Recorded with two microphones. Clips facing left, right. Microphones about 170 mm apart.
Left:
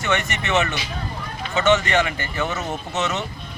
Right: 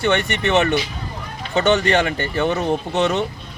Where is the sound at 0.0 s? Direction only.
35° right (ahead or behind).